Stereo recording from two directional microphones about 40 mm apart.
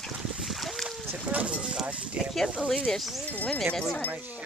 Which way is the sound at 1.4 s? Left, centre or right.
Right.